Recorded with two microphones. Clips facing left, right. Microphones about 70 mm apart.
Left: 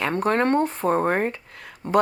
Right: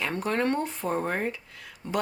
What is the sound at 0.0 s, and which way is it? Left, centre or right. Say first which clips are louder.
A woman's voice: left 6 dB; left.